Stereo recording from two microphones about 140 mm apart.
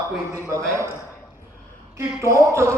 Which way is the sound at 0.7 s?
20° right (ahead or behind).